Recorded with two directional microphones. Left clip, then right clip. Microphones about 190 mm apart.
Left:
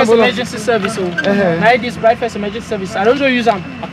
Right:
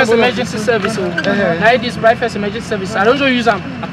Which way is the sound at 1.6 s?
Centre (ahead or behind).